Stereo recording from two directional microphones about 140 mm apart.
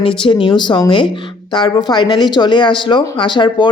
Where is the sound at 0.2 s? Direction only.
35° left (ahead or behind).